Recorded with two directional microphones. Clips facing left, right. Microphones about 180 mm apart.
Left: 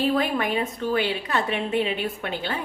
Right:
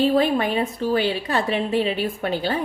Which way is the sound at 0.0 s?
30° right (ahead or behind).